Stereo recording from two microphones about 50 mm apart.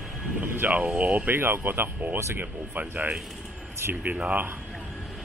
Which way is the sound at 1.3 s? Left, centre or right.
Right.